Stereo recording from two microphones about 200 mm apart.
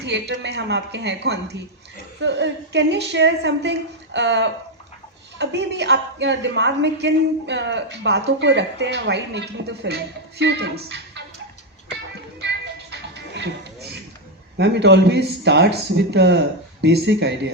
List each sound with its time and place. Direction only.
0.0 s a woman's voice: 60° right (ahead or behind)
12.4 s music: 60° right (ahead or behind)
14.6 s a woman's voice: 60° right (ahead or behind)